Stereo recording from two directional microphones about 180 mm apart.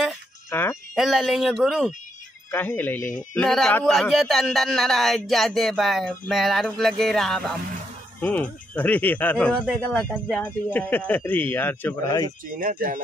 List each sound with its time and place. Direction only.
0.5 s a sound: 10° left (ahead or behind)
0.9 s a man's voice: centre (ahead or behind)
2.5 s a man's voice: 10° left (ahead or behind)
12.4 s speech: 50° right (ahead or behind)